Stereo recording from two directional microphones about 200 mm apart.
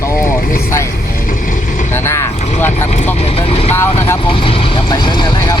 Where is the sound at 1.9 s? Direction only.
10° left (ahead or behind).